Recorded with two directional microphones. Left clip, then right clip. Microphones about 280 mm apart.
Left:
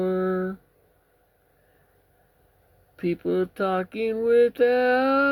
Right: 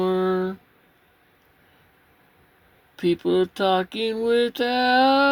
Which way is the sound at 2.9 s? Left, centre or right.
Centre.